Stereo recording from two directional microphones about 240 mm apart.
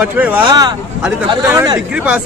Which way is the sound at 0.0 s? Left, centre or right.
Centre.